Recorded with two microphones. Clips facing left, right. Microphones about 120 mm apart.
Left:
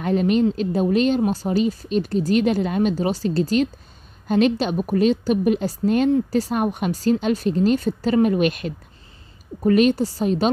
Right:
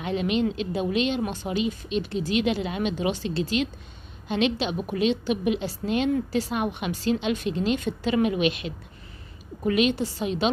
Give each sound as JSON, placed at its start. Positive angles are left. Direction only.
{"t": 0.0, "sound": "a woman's voice", "side_deg": 45}